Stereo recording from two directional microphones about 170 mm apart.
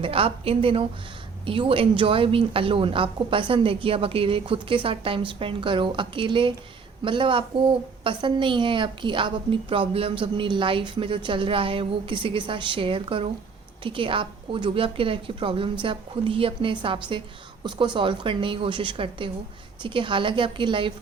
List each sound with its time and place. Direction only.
0.0 s a woman's voice: 35° right (ahead or behind)